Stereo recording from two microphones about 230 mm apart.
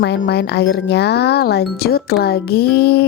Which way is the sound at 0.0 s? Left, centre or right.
Left.